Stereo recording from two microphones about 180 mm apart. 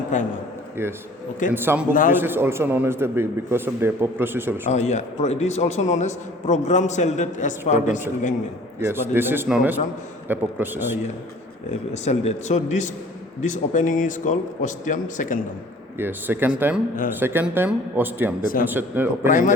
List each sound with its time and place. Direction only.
0.1 s speech: 45° left (ahead or behind)
0.8 s a man's voice: 15° right (ahead or behind)
1.9 s speech: 50° left (ahead or behind)
2.2 s a man's voice: 15° right (ahead or behind)
4.7 s a man's voice: 40° left (ahead or behind)
8.8 s a man's voice: 10° right (ahead or behind)
12.0 s a man's voice: 40° left (ahead or behind)
16.0 s a man's voice: 10° right (ahead or behind)
19.3 s speech: 45° left (ahead or behind)